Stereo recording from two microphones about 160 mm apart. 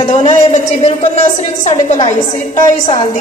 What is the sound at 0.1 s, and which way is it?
A woman's voice, 45° left (ahead or behind).